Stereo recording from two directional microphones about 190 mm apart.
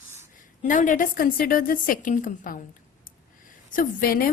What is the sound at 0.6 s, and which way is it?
A woman's voice, 40° left (ahead or behind).